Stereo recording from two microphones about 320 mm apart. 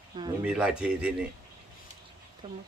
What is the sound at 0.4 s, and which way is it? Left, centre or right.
Speech, centre.